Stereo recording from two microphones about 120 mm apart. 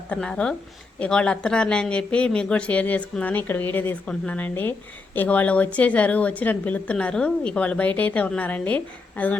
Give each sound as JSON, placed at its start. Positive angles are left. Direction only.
{"t": 0.1, "sound": "a woman's voice", "side_deg": 5}